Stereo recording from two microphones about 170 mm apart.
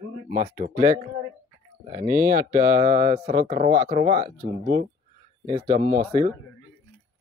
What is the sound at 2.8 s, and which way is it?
Speech, 30° right (ahead or behind).